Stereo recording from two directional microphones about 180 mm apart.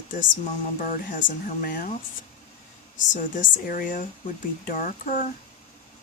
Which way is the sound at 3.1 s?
45° left (ahead or behind).